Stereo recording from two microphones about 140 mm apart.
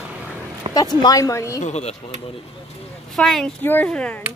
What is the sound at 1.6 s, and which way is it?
Speech, 55° left (ahead or behind).